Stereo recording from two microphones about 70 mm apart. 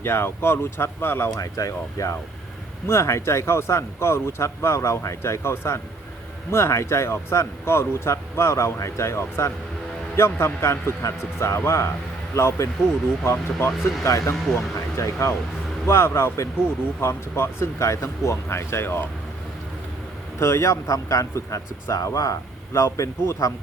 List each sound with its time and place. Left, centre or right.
0.0 s speech: left
1.4 s speech: left
2.8 s speech: left
20.4 s speech: left